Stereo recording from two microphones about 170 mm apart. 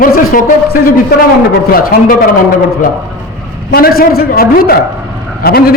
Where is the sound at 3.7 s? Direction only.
65° left (ahead or behind).